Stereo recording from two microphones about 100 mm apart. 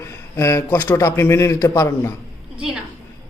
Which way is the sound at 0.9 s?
30° left (ahead or behind).